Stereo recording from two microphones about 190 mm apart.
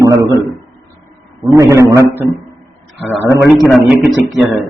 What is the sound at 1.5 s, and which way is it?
Speech, 15° right (ahead or behind).